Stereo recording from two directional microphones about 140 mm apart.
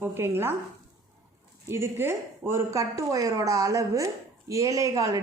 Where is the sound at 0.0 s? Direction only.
15° right (ahead or behind).